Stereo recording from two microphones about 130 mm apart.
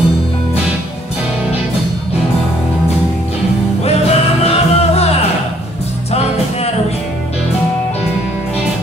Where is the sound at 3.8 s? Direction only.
55° left (ahead or behind).